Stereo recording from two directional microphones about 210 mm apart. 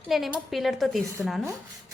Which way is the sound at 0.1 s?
Centre (ahead or behind).